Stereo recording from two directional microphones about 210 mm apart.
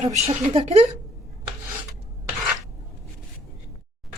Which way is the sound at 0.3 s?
25° right (ahead or behind).